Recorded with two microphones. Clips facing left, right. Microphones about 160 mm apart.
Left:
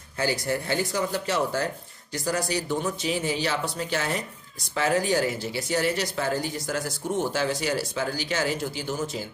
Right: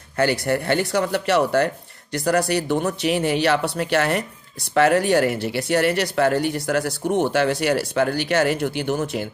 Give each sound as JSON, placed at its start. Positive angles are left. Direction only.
{"t": 0.2, "sound": "speech", "side_deg": -65}